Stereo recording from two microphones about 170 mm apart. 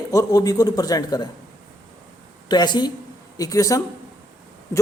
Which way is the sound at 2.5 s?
25° left (ahead or behind).